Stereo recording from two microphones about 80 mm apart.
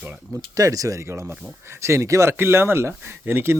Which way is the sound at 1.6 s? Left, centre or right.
Right.